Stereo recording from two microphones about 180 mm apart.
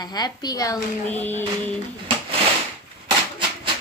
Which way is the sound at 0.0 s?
20° left (ahead or behind).